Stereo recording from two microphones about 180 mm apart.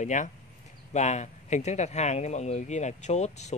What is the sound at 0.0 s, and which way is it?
A man's voice, 45° left (ahead or behind).